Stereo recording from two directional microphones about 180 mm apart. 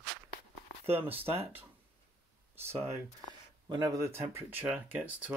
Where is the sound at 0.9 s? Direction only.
10° right (ahead or behind).